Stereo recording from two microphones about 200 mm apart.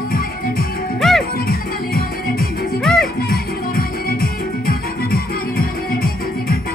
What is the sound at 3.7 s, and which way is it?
Music, 50° left (ahead or behind).